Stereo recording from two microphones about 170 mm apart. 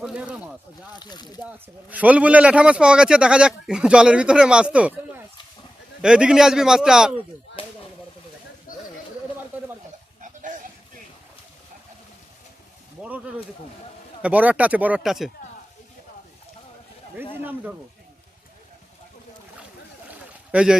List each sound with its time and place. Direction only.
0.0 s speech: 5° right (ahead or behind)
0.9 s speech: 25° left (ahead or behind)
1.4 s a man's voice: 10° right (ahead or behind)
6.0 s a man's voice: 5° right (ahead or behind)
7.6 s chop: 30° left (ahead or behind)
8.7 s a sound: 55° left (ahead or behind)
10.2 s a sound: 50° right (ahead or behind)
13.0 s speech: 10° right (ahead or behind)
20.1 s a sound: 5° right (ahead or behind)